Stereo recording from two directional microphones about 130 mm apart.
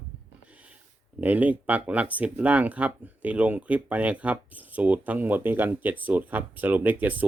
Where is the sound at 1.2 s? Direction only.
15° right (ahead or behind).